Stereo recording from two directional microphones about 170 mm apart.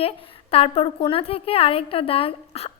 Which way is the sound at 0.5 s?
35° left (ahead or behind).